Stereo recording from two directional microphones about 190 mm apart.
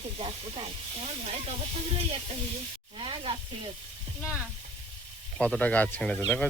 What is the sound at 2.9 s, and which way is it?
Sizzle, 25° right (ahead or behind).